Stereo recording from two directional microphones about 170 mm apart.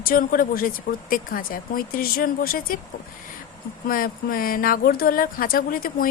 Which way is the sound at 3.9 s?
60° left (ahead or behind).